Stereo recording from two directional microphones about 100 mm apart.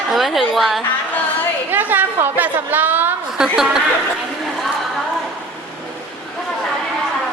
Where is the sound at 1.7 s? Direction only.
20° right (ahead or behind).